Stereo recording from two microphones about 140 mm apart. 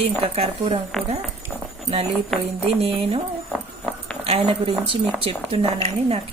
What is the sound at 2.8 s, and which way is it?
Speech, 45° right (ahead or behind).